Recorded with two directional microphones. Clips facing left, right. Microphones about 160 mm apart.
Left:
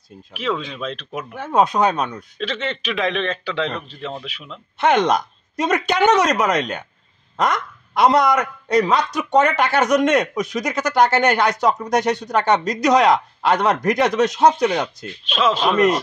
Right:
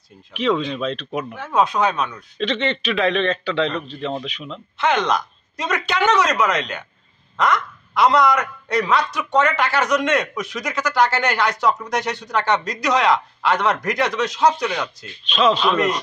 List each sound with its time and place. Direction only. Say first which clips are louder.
0.3 s speech: right 4 dB; 5° left (ahead or behind)
1.3 s a man's voice: left 3 dB; 45° left (ahead or behind)
2.3 s a man's voice: right 6 dB; 5° left (ahead or behind)
4.7 s a woman's voice: left 3 dB; 50° left (ahead or behind)
15.2 s a man's voice: right 2 dB; 10° left (ahead or behind)